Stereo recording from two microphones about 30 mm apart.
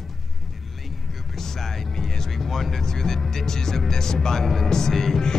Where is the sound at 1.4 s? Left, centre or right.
Centre.